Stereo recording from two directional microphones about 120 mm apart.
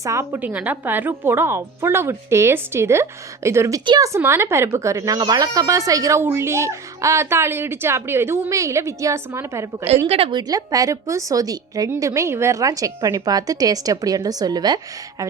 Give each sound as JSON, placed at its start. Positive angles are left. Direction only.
{"t": 0.0, "sound": "a woman's voice", "side_deg": -25}
{"t": 0.3, "sound": "a woman's voice", "side_deg": -15}
{"t": 3.8, "sound": "speech", "side_deg": -35}
{"t": 4.1, "sound": "a woman's voice", "side_deg": -20}
{"t": 10.1, "sound": "a woman's voice", "side_deg": -50}
{"t": 10.4, "sound": "a woman's voice", "side_deg": -30}